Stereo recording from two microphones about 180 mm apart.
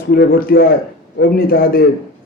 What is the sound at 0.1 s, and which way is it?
Speech, 55° left (ahead or behind).